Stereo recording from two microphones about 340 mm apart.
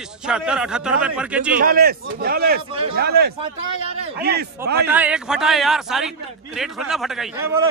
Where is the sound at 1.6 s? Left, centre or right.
Right.